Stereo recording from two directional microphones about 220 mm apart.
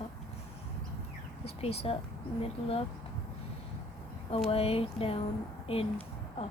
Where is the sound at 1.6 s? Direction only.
25° left (ahead or behind).